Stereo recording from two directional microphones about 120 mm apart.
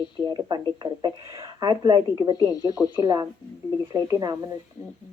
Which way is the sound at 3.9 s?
30° right (ahead or behind).